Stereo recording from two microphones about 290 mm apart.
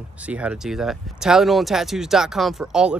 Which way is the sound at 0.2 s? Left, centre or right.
Centre.